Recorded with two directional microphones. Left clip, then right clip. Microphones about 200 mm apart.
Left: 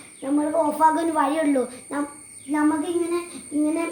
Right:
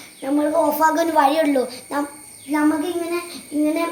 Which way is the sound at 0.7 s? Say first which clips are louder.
Right 3 dB; 15° left (ahead or behind).